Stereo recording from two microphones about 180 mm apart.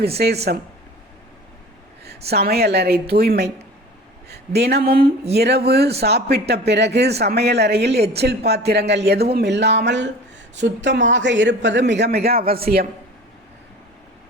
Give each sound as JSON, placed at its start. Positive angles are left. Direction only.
{"t": 0.5, "sound": "speech", "side_deg": -60}
{"t": 2.0, "sound": "a man's voice", "side_deg": -65}